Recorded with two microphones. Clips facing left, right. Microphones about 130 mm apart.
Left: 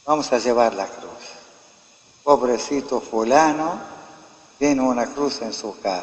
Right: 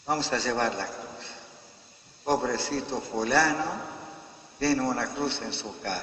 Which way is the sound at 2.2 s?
60° left (ahead or behind).